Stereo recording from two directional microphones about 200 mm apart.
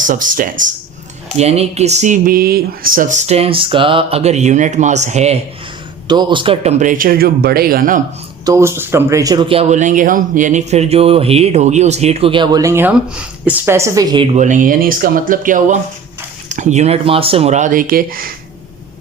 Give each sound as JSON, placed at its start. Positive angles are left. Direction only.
{"t": 0.0, "sound": "speech", "side_deg": -40}
{"t": 1.4, "sound": "speech", "side_deg": -30}
{"t": 6.1, "sound": "speech", "side_deg": -20}
{"t": 8.4, "sound": "speech", "side_deg": -15}
{"t": 14.3, "sound": "speech", "side_deg": -40}